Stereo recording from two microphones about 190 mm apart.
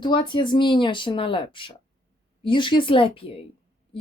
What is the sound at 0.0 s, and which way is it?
A woman's voice, 25° left (ahead or behind).